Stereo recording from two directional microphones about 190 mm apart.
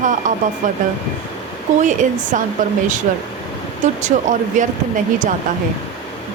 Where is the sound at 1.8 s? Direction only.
40° right (ahead or behind).